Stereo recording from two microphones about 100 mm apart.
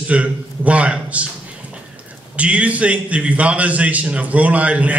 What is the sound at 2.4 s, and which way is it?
A man's voice, 15° right (ahead or behind).